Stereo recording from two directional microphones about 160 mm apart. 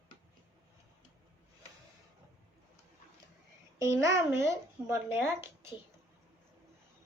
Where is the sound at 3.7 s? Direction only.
20° right (ahead or behind).